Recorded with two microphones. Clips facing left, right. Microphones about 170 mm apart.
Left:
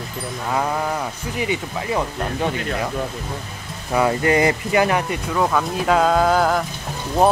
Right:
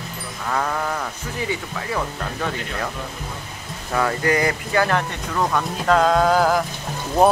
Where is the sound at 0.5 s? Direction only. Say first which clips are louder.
Left 1 dB; 15° left (ahead or behind).